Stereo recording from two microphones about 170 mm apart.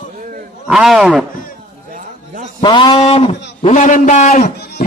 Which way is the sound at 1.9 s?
50° right (ahead or behind).